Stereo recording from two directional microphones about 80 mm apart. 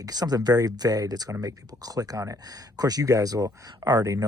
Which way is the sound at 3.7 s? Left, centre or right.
Right.